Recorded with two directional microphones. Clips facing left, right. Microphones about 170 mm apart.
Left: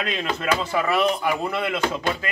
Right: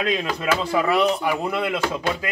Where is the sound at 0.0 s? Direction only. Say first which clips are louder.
Right 3 dB; 15° right (ahead or behind).